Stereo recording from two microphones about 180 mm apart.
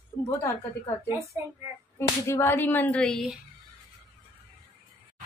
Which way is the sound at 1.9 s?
15° left (ahead or behind).